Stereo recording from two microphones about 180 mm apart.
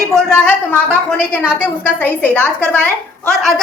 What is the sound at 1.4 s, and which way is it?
A woman's voice, 10° left (ahead or behind).